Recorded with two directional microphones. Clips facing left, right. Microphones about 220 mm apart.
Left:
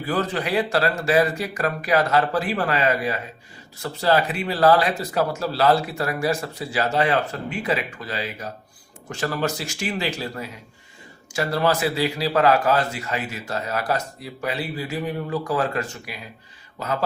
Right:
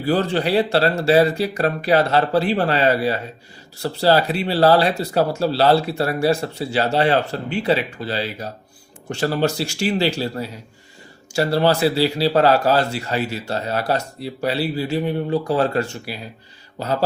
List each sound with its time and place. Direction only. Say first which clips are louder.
0.0 s speech: right 5 dB; 30° right (ahead or behind)